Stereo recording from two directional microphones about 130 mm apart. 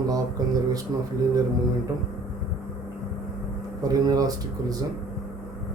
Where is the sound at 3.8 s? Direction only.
30° right (ahead or behind).